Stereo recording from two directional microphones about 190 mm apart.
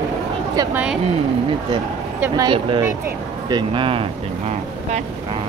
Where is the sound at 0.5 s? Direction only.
20° right (ahead or behind).